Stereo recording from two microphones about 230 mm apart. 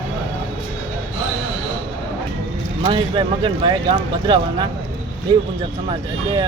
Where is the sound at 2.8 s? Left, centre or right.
Right.